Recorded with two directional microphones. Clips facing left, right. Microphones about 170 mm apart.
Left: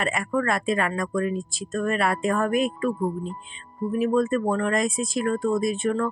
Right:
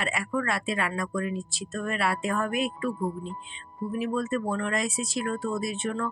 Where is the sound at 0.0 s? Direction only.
45° left (ahead or behind).